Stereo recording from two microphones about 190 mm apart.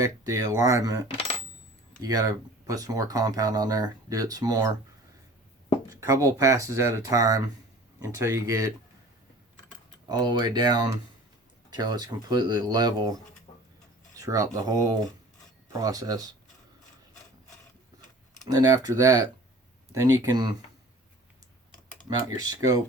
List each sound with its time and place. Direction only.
0.0 s speech: 15° right (ahead or behind)
5.9 s speech: 15° right (ahead or behind)
10.1 s speech: 20° right (ahead or behind)
14.2 s speech: 15° right (ahead or behind)
18.4 s speech: 20° right (ahead or behind)
22.3 s speech: 20° right (ahead or behind)